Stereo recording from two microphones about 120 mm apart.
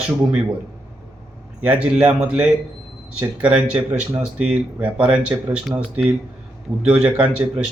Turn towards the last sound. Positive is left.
turn(degrees=-10)  # may be behind; listen again after turning